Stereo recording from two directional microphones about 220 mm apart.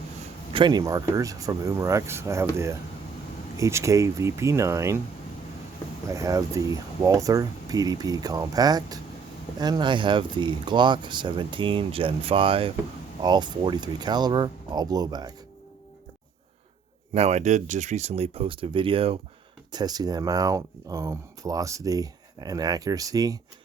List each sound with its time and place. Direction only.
0.5 s speech: 20° right (ahead or behind)
6.1 s speech: 15° right (ahead or behind)
17.2 s speech: 30° right (ahead or behind)